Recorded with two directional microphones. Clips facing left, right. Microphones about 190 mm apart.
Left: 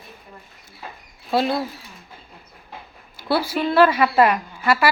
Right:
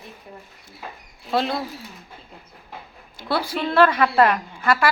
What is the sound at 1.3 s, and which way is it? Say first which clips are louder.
Speech: left 2 dB; 5° left (ahead or behind).